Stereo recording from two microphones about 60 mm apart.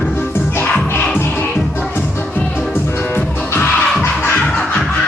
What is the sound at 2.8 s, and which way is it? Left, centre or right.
Music, left.